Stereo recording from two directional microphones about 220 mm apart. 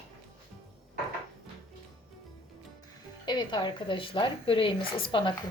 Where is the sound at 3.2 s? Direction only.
20° left (ahead or behind).